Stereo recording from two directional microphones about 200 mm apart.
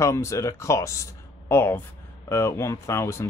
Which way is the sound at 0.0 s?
15° left (ahead or behind).